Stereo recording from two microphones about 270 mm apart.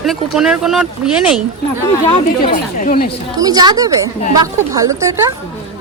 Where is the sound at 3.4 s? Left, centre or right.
Centre.